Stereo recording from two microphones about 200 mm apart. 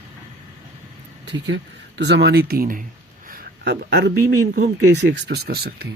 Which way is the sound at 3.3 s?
55° right (ahead or behind).